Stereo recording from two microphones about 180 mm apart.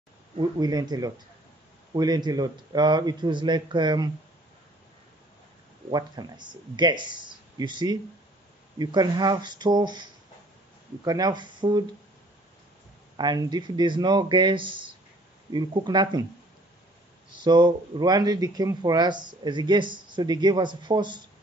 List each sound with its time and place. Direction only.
0.4 s speech: 20° right (ahead or behind)
5.9 s speech: 20° right (ahead or behind)
11.1 s speech: 20° right (ahead or behind)
13.1 s speech: 25° right (ahead or behind)
17.4 s speech: 25° right (ahead or behind)